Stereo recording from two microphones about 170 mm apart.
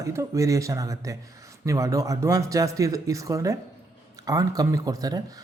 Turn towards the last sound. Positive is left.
turn(degrees=-20)  # may be behind; listen again after turning